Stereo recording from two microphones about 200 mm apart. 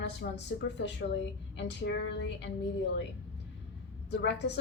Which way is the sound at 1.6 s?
60° left (ahead or behind).